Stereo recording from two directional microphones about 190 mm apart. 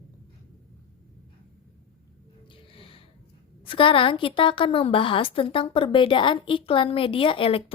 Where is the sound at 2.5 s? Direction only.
30° left (ahead or behind).